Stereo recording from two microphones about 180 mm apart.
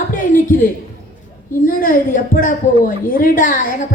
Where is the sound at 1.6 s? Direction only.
50° left (ahead or behind).